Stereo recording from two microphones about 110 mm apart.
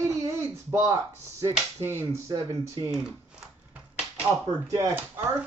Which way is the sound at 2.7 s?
30° right (ahead or behind).